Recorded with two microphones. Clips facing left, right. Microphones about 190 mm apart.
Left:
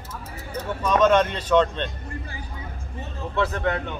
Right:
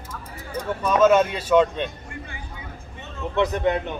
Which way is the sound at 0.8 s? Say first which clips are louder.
Right 2 dB; 5° right (ahead or behind).